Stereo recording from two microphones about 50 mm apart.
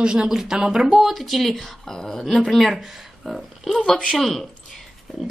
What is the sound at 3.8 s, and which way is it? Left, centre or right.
Speech, centre.